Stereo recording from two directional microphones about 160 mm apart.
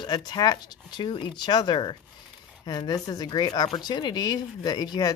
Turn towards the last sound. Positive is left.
turn(degrees=25)  # may be behind; listen again after turning